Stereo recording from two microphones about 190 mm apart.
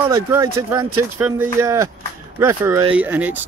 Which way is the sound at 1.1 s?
10° right (ahead or behind).